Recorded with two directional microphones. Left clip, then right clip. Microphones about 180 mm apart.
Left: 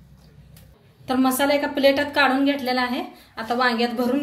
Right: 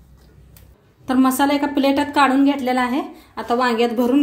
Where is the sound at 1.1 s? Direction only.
50° right (ahead or behind).